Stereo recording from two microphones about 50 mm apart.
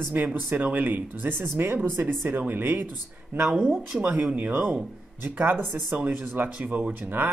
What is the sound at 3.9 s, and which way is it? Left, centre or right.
Speech, right.